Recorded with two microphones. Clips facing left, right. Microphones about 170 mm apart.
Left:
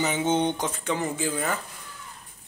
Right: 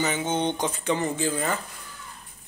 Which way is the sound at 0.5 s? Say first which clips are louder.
Right 2 dB; centre (ahead or behind).